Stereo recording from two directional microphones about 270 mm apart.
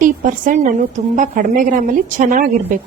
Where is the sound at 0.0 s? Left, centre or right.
Right.